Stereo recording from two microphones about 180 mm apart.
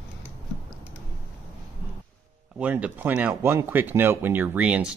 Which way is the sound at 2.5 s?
10° right (ahead or behind).